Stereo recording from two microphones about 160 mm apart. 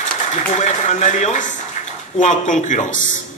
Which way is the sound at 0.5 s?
45° left (ahead or behind).